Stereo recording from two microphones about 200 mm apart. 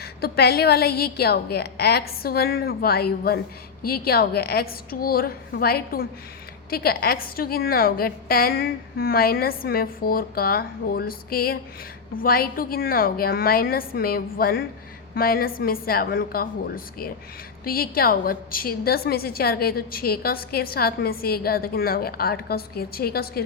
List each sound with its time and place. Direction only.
0.0 s a woman's voice: 50° left (ahead or behind)